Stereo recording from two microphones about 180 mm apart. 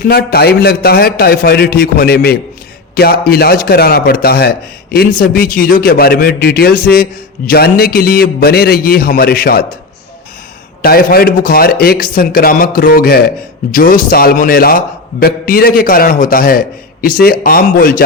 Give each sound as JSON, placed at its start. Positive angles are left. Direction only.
{"t": 0.0, "sound": "a man's voice", "side_deg": 60}
{"t": 10.8, "sound": "a man's voice", "side_deg": 55}